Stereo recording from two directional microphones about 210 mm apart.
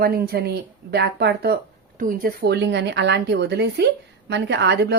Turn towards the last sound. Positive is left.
turn(degrees=-55)  # may be behind; listen again after turning